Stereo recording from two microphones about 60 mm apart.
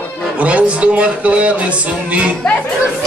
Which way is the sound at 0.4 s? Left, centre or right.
Right.